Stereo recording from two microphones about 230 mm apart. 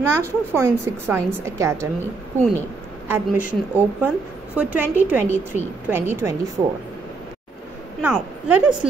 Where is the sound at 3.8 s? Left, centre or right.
Centre.